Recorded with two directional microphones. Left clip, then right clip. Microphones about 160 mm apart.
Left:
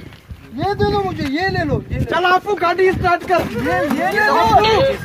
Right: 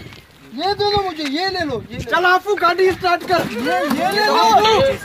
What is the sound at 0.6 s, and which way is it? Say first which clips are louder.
Speech: even; centre (ahead or behind).